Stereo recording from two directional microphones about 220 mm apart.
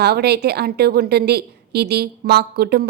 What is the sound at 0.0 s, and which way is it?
A woman's voice, 45° right (ahead or behind).